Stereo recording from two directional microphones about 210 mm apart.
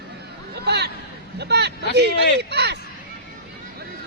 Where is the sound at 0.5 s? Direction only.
50° right (ahead or behind).